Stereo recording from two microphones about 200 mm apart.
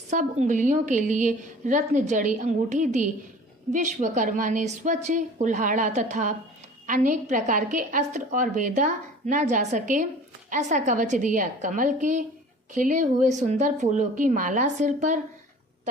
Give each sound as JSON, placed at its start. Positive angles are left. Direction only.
{"t": 0.1, "sound": "a woman's voice", "side_deg": -35}